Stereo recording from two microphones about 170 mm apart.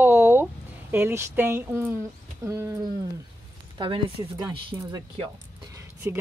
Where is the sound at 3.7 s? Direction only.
30° right (ahead or behind).